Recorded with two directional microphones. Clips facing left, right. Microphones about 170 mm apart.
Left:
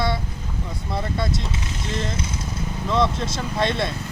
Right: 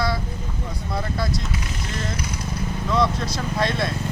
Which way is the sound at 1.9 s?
25° left (ahead or behind).